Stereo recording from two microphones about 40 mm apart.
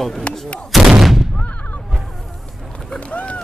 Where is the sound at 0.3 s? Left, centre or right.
Left.